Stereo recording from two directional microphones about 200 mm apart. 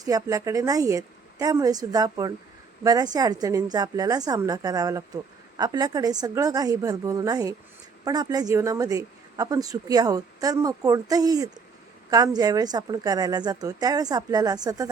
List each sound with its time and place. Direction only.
0.0 s a woman's voice: 20° right (ahead or behind)